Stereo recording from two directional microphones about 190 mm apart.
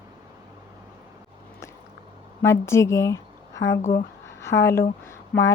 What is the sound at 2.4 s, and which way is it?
Speech, 15° left (ahead or behind).